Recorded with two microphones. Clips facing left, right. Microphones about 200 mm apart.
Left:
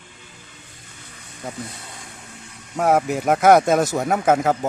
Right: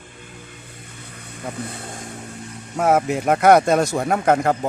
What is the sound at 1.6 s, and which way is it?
Vehicle, 55° right (ahead or behind).